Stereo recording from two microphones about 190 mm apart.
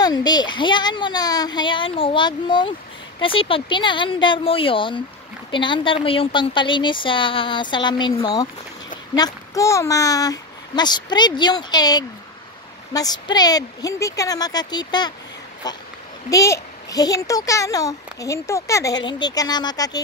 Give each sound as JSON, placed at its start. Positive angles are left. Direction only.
{"t": 0.0, "sound": "a woman's voice", "side_deg": 20}